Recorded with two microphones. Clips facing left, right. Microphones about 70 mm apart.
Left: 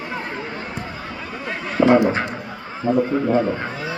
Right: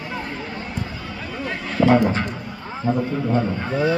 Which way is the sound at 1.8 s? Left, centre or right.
Centre.